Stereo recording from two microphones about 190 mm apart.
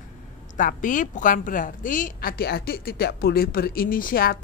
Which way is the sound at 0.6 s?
45° left (ahead or behind).